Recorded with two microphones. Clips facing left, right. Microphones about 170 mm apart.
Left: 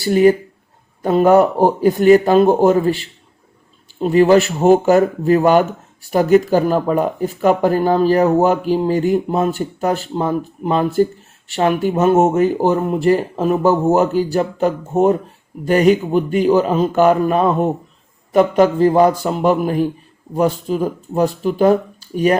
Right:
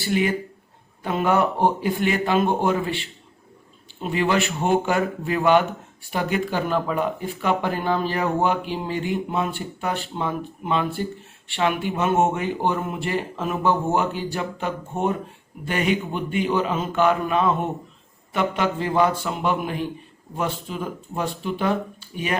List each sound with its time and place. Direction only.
0.0 s speech: 40° left (ahead or behind)